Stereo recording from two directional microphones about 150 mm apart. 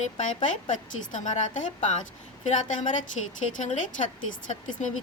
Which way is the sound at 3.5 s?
55° left (ahead or behind).